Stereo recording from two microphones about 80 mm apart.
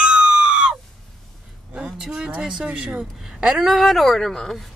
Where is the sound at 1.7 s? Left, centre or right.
Centre.